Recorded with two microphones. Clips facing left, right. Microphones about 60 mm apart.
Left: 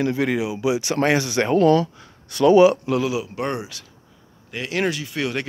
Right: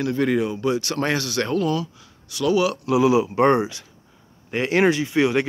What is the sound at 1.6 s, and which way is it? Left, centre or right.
Speech, left.